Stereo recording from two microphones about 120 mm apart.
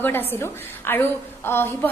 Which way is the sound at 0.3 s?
20° left (ahead or behind).